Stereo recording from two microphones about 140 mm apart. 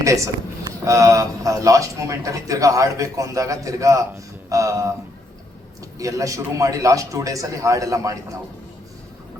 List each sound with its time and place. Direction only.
0.0 s a man's voice: 25° right (ahead or behind)
6.0 s a man's voice: 25° right (ahead or behind)